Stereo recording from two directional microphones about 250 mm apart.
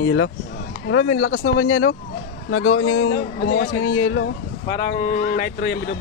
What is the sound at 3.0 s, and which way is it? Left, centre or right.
Speech, left.